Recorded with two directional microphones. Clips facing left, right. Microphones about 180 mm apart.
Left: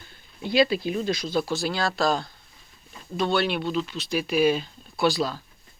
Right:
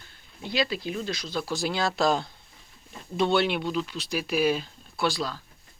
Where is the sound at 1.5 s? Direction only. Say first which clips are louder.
Left 1 dB; 20° right (ahead or behind); by 5.3 s centre (ahead or behind).